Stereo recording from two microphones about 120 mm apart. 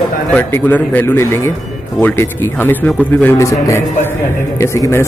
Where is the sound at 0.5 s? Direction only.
15° left (ahead or behind).